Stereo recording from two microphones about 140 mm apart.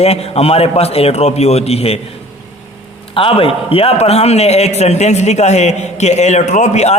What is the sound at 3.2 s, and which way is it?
A man's voice, 40° left (ahead or behind).